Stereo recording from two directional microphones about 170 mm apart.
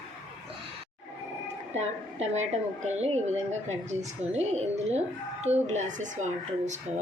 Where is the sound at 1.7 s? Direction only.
40° right (ahead or behind).